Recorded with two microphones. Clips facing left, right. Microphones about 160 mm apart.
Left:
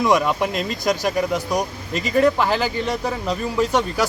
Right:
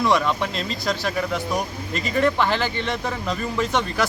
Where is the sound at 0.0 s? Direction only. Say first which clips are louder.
Left 2 dB; 15° left (ahead or behind).